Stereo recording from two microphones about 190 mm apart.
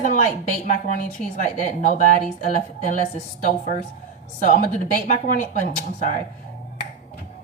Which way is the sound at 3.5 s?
45° left (ahead or behind).